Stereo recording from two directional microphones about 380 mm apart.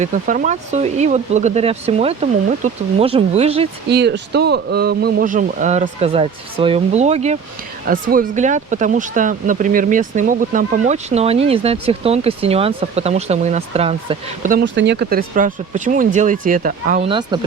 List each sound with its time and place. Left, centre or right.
0.0 s speech: right
3.8 s speech: right